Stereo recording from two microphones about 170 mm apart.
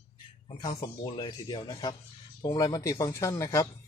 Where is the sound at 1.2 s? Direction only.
25° left (ahead or behind).